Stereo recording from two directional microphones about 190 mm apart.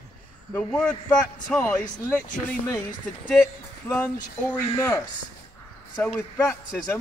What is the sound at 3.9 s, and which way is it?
Speech, 15° left (ahead or behind).